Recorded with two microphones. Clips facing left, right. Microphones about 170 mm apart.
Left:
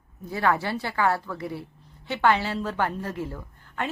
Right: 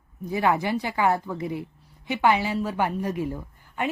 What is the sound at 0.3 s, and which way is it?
A woman's voice, 15° right (ahead or behind).